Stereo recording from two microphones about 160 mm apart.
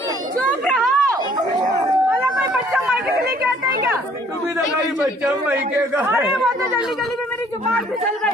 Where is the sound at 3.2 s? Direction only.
70° right (ahead or behind).